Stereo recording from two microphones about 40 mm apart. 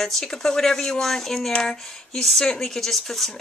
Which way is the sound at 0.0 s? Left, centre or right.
Centre.